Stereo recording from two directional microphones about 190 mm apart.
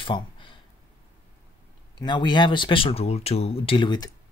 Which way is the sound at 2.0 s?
25° left (ahead or behind).